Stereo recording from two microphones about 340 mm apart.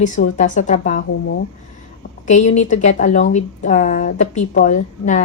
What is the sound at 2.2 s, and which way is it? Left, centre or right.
A woman's voice, left.